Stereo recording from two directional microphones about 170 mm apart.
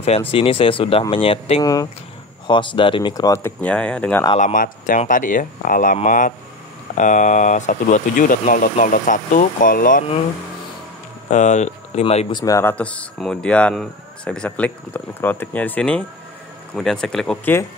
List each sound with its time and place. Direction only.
0.3 s speech: 35° left (ahead or behind)
1.6 s speech: 20° left (ahead or behind)
3.6 s speech: 5° left (ahead or behind)
4.4 s speech: 50° left (ahead or behind)
11.2 s speech: 45° left (ahead or behind)
12.4 s speech: 20° left (ahead or behind); by 17.6 s 5° left (ahead or behind)